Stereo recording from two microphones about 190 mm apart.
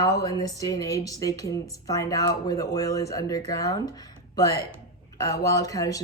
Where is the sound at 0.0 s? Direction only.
20° left (ahead or behind).